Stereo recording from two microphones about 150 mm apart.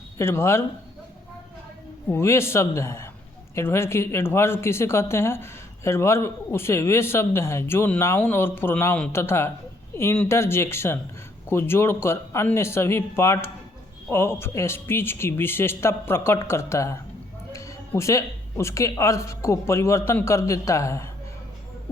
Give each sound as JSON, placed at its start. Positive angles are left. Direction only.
{"t": 0.2, "sound": "speech", "side_deg": 15}
{"t": 2.0, "sound": "speech", "side_deg": 15}